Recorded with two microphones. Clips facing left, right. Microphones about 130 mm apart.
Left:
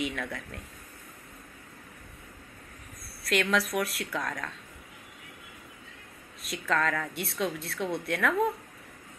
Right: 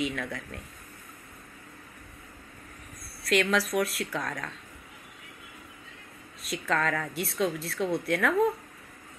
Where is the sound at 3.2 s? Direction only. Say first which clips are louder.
Right 2 dB; centre (ahead or behind).